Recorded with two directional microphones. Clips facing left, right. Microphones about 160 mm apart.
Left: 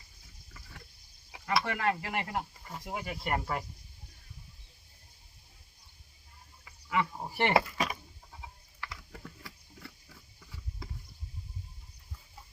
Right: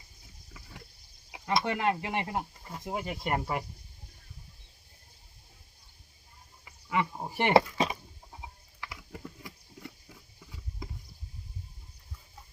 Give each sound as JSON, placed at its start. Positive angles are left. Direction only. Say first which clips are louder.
{"t": 1.3, "sound": "speech", "louder": "right 2 dB", "side_deg": -20}
{"t": 6.7, "sound": "speech", "louder": "right 1 dB", "side_deg": -15}
{"t": 7.8, "sound": "patter", "louder": "right 4 dB", "side_deg": -25}